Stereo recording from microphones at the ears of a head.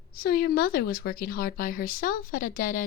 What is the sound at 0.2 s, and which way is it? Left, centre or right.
Speech, left.